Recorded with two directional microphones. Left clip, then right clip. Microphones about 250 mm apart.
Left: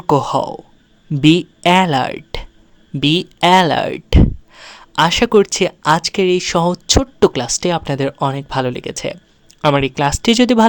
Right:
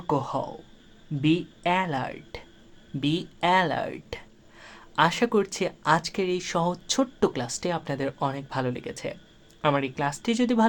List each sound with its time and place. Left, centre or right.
0.1 s speech: left